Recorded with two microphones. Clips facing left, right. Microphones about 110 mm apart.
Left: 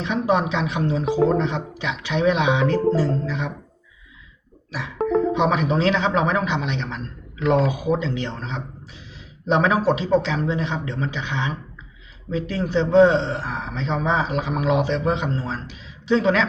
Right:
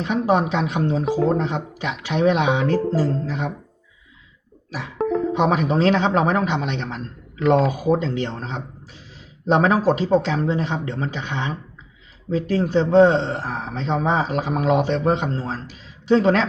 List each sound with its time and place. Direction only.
0.0 s speech: 45° right (ahead or behind)
5.0 s speech: 45° right (ahead or behind)